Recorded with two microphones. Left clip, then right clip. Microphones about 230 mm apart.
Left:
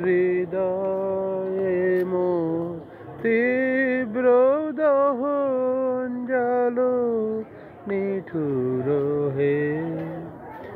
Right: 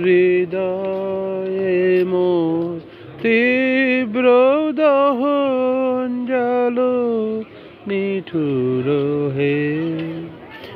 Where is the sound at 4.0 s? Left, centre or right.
Right.